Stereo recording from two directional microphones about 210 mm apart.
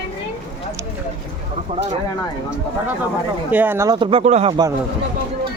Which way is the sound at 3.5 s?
10° right (ahead or behind).